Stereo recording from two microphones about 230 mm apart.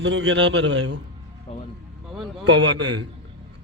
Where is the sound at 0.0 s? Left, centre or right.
Right.